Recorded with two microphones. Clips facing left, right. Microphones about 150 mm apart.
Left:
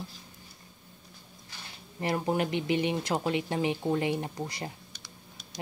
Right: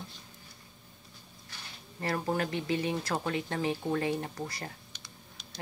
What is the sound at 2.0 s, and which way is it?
A woman's voice, 20° left (ahead or behind).